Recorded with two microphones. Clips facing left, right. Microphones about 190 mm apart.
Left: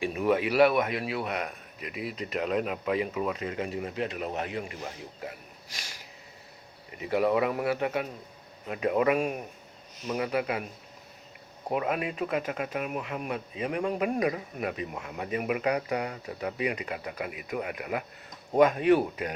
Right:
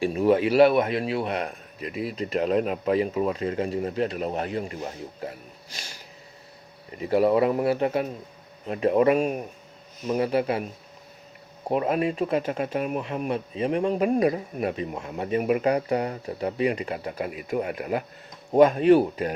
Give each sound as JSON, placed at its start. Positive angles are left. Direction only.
{"t": 0.0, "sound": "speech", "side_deg": -30}
{"t": 7.0, "sound": "speech", "side_deg": -35}
{"t": 11.7, "sound": "speech", "side_deg": -35}